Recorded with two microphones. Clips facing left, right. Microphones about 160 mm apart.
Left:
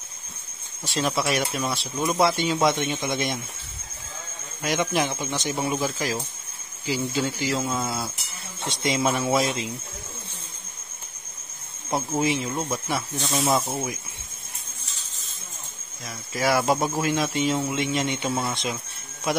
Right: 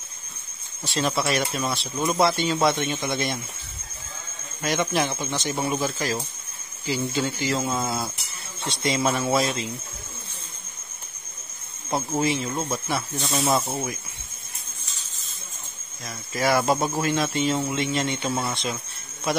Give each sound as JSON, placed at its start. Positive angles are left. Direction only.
{"t": 0.8, "sound": "speech", "side_deg": 10}
{"t": 4.6, "sound": "speech", "side_deg": 10}
{"t": 7.6, "sound": "speech", "side_deg": -5}
{"t": 8.6, "sound": "speech", "side_deg": 15}
{"t": 11.9, "sound": "speech", "side_deg": 10}
{"t": 12.6, "sound": "speech", "side_deg": -5}
{"t": 16.3, "sound": "speech", "side_deg": 5}